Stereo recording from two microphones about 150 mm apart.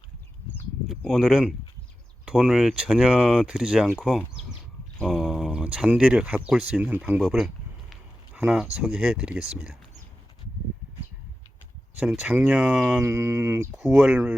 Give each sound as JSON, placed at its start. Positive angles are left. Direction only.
{"t": 0.9, "sound": "speech", "side_deg": 0}
{"t": 7.2, "sound": "a sound", "side_deg": 0}
{"t": 8.7, "sound": "speech", "side_deg": -5}
{"t": 11.9, "sound": "speech", "side_deg": -5}
{"t": 13.0, "sound": "speech", "side_deg": -15}